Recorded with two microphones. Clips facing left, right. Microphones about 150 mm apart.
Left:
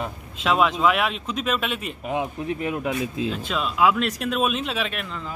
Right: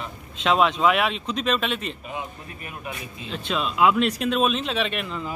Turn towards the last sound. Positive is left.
turn(degrees=-5)  # may be behind; listen again after turning